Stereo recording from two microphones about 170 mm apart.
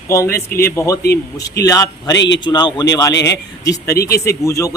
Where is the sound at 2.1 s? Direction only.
90° left.